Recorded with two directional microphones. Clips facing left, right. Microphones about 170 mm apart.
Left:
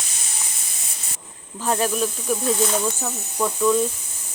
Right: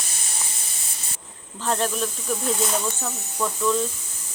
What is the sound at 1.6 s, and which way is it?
Speech, 10° left (ahead or behind).